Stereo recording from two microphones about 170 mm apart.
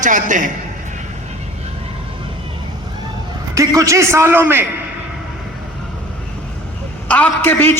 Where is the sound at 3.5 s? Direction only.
20° right (ahead or behind).